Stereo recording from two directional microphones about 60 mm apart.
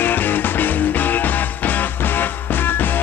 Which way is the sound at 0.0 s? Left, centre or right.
Left.